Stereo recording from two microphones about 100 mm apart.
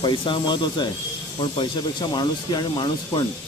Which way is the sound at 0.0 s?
55° left (ahead or behind).